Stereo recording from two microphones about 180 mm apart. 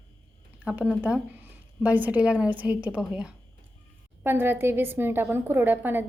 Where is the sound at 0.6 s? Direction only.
5° right (ahead or behind).